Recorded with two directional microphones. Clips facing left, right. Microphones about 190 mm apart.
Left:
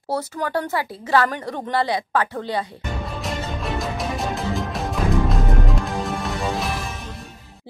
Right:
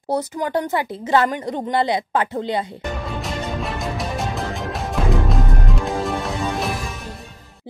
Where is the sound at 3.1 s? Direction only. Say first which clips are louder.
Right 2 dB; centre (ahead or behind).